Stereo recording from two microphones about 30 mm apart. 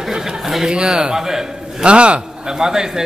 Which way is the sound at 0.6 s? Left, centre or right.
Right.